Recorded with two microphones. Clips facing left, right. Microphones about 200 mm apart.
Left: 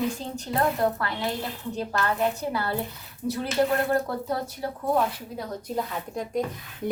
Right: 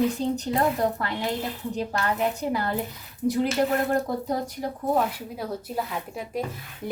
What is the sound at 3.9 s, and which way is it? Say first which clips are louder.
Speech: right 1 dB; 15° right (ahead or behind).